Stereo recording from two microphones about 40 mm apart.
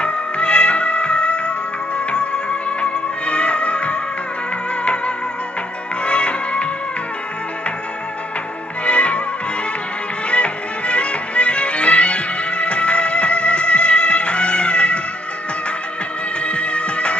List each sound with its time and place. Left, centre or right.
0.0 s music: left
6.0 s music: left
8.8 s music: left
10.3 s music: left
16.4 s music: left